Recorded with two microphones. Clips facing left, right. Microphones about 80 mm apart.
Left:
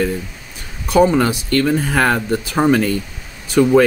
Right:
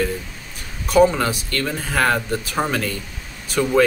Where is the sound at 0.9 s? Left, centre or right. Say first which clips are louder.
Left 2 dB; left.